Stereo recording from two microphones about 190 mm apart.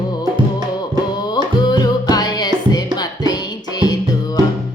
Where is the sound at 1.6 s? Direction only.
20° left (ahead or behind).